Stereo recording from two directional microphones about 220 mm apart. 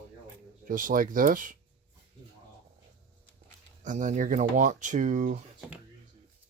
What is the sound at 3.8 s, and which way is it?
Speech, 35° right (ahead or behind).